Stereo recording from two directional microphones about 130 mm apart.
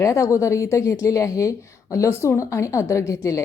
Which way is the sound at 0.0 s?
25° left (ahead or behind).